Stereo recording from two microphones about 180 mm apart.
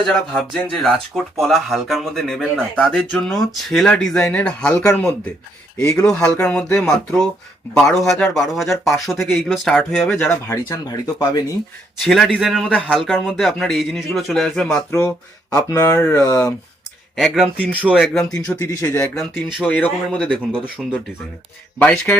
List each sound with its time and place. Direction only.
0.1 s speech: centre (ahead or behind)
10.2 s speech: 15° left (ahead or behind)
12.0 s speech: centre (ahead or behind)
14.9 s speech: 15° left (ahead or behind)
17.2 s speech: centre (ahead or behind)
18.6 s speech: 15° left (ahead or behind)
19.2 s speech: 5° left (ahead or behind)
21.8 s speech: 10° left (ahead or behind)